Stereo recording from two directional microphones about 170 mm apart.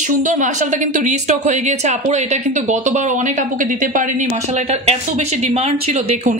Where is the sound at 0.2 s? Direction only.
50° right (ahead or behind).